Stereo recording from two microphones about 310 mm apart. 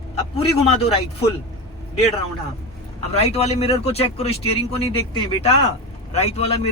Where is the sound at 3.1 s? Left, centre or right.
Centre.